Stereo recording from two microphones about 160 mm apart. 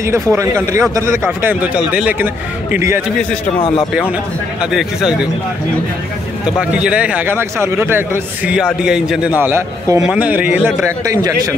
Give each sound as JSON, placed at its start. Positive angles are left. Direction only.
{"t": 0.0, "sound": "a man's voice", "side_deg": -20}
{"t": 3.5, "sound": "speech", "side_deg": 35}
{"t": 4.6, "sound": "speech", "side_deg": -5}
{"t": 6.4, "sound": "a man's voice", "side_deg": -5}
{"t": 9.4, "sound": "a man's voice", "side_deg": -15}
{"t": 10.9, "sound": "a man's voice", "side_deg": -20}